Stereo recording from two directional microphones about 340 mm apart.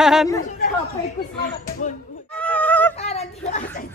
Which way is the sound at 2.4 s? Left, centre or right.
Centre.